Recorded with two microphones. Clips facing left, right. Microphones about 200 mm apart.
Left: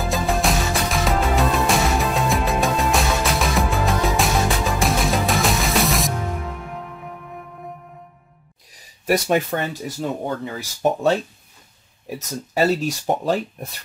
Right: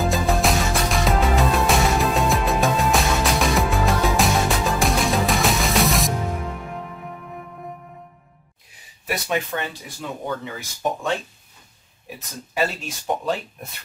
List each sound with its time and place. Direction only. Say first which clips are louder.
0.0 s music: right 1 dB; centre (ahead or behind)
8.7 s speech: left 8 dB; 45° left (ahead or behind)
12.5 s speech: left 6 dB; 40° left (ahead or behind)